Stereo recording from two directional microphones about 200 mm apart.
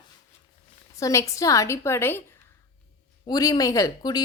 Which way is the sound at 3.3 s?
20° left (ahead or behind).